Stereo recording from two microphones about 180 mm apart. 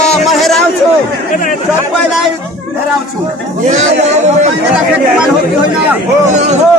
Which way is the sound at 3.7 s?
40° right (ahead or behind).